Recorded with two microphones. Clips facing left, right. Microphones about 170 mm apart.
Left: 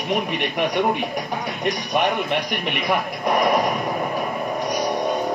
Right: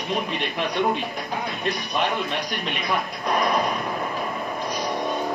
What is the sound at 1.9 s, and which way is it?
Speech, 15° left (ahead or behind).